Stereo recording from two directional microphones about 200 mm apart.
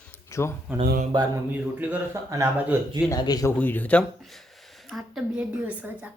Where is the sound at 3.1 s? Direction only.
20° left (ahead or behind).